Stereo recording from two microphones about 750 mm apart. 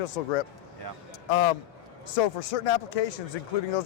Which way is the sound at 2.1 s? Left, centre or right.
Left.